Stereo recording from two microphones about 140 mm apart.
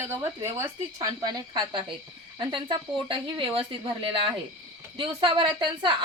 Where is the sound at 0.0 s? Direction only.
20° right (ahead or behind).